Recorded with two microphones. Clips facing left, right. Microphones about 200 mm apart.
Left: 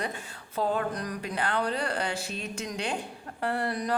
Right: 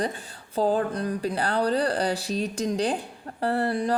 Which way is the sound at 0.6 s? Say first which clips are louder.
Right 5 dB; 30° right (ahead or behind).